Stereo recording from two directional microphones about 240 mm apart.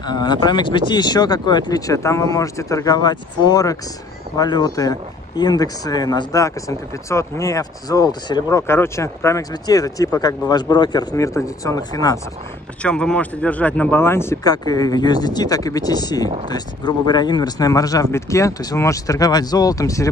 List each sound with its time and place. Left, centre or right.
0.0 s speech: centre
12.8 s speech: centre